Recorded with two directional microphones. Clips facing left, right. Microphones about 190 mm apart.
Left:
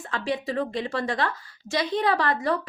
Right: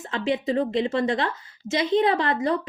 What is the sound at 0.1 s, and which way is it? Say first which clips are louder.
A woman's voice: right 4 dB; 20° right (ahead or behind).